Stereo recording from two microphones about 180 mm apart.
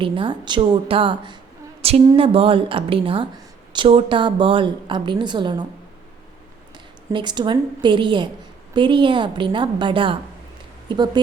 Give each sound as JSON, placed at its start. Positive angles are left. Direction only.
{"t": 0.0, "sound": "speech", "side_deg": -25}
{"t": 7.1, "sound": "speech", "side_deg": -25}